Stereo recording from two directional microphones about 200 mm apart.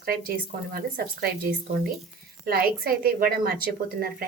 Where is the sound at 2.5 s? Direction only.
50° right (ahead or behind).